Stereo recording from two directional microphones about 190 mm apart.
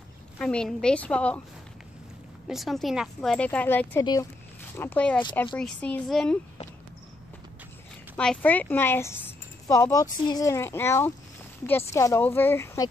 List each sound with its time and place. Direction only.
0.4 s speech: 5° left (ahead or behind)
2.4 s speech: centre (ahead or behind)
4.0 s speech: 20° left (ahead or behind)
4.7 s speech: 10° left (ahead or behind)
8.2 s speech: 5° left (ahead or behind)